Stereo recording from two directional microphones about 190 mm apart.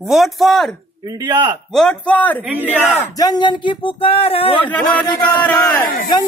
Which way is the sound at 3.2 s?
20° left (ahead or behind).